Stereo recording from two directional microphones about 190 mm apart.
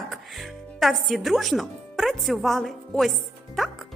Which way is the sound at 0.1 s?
Centre (ahead or behind).